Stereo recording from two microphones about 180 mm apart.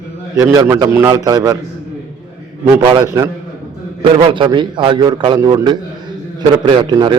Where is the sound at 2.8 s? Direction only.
25° right (ahead or behind).